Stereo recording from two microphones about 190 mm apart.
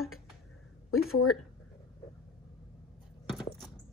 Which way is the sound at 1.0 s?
90° left.